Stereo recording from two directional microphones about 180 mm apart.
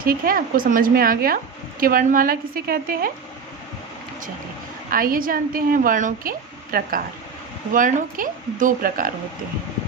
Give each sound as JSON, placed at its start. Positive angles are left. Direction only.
{"t": 0.0, "sound": "a woman's voice", "side_deg": -55}
{"t": 4.9, "sound": "a woman's voice", "side_deg": -50}